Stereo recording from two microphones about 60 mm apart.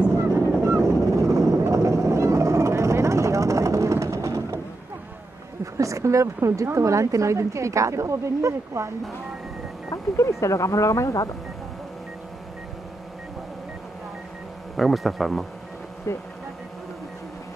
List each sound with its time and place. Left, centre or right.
0.3 s honk: right
1.2 s vehicle: right
5.8 s a woman's voice: right
9.8 s speech: left
14.8 s speech: centre
16.1 s hum: left